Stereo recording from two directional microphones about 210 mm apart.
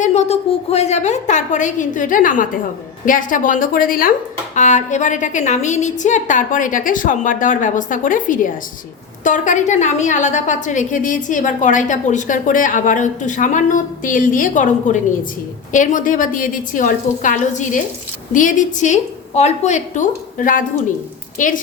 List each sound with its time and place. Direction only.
0.0 s a woman's voice: 30° left (ahead or behind)